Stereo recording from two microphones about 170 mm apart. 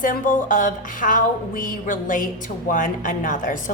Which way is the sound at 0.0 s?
50° left (ahead or behind).